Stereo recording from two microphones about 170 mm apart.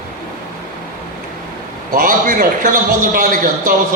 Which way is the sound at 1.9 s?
55° right (ahead or behind).